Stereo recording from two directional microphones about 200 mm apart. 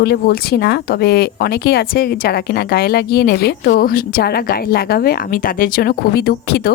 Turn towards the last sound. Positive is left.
turn(degrees=55)  # may be behind; listen again after turning